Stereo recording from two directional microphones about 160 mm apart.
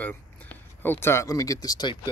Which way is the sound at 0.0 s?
10° left (ahead or behind).